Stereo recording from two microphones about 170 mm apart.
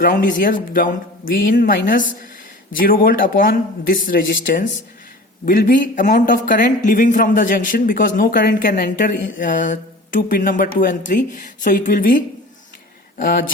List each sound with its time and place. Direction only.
0.0 s speech: 55° left (ahead or behind)